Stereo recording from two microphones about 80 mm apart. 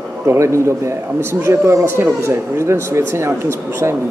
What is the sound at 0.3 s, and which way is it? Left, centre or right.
Speech, right.